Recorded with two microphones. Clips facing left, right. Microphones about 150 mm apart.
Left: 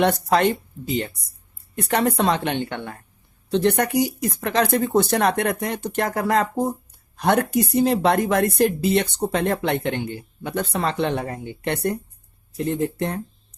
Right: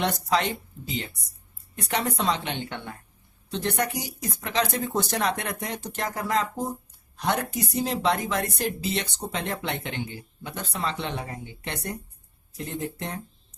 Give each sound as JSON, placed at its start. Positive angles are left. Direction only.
{"t": 0.0, "sound": "speech", "side_deg": 55}